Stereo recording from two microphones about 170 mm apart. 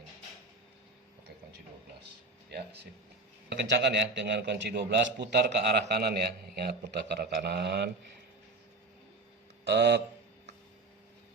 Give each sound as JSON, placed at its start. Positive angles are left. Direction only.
{"t": 2.5, "sound": "speech", "side_deg": -75}
{"t": 3.5, "sound": "a man's voice", "side_deg": -90}
{"t": 9.6, "sound": "a man's voice", "side_deg": -85}